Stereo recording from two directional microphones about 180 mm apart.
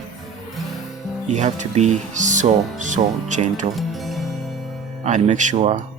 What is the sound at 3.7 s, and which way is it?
Music, centre (ahead or behind).